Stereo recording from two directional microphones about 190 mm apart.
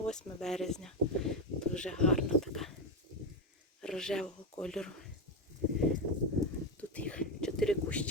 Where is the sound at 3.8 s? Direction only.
5° left (ahead or behind).